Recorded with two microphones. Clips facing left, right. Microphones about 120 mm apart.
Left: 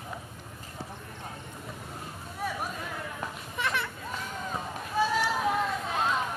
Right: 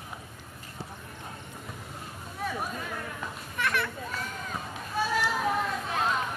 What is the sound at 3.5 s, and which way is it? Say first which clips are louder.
Children playing: right 2 dB; 25° left (ahead or behind).